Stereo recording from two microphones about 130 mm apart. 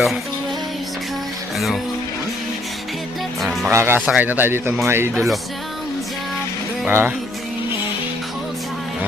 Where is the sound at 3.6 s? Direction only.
20° right (ahead or behind).